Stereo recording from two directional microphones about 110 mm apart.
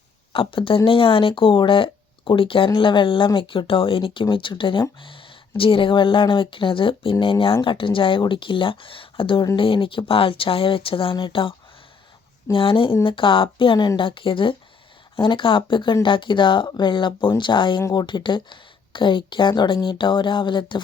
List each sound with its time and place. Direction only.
0.3 s speech: 55° left (ahead or behind)
12.5 s speech: 55° left (ahead or behind)